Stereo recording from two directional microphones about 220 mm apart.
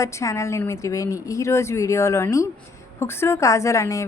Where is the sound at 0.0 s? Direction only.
15° left (ahead or behind).